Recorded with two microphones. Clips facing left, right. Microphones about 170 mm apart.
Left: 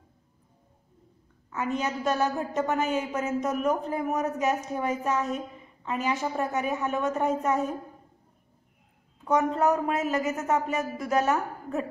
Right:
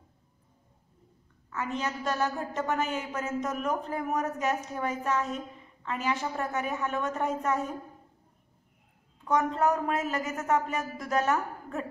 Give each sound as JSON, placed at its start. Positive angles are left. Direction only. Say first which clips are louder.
{"t": 1.5, "sound": "a woman's voice", "louder": "left 4 dB", "side_deg": 20}
{"t": 9.2, "sound": "a woman's voice", "louder": "left 2 dB", "side_deg": 10}